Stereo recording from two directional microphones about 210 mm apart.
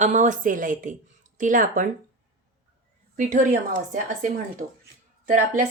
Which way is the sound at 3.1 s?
35° right (ahead or behind).